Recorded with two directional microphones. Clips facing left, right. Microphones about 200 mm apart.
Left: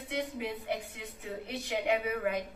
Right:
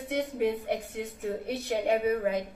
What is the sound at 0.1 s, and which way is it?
A woman's voice, 50° right (ahead or behind).